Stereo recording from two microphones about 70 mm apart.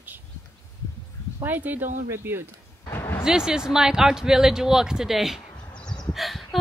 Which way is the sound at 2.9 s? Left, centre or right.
Left.